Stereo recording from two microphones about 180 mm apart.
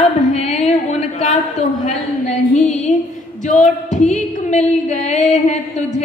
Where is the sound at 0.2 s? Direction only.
40° left (ahead or behind).